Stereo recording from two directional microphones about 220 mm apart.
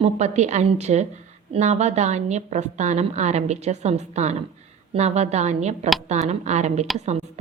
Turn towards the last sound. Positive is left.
turn(degrees=-30)  # may be behind; listen again after turning